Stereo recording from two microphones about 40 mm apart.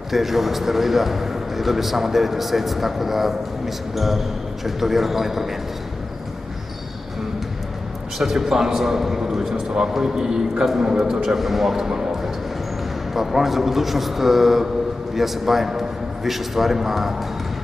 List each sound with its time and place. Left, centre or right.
0.1 s a man's voice: centre
8.2 s a man's voice: centre
11.2 s a man's voice: centre